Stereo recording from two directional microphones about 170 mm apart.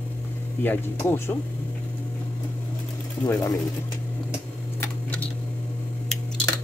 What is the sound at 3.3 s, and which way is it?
Speech, 20° left (ahead or behind).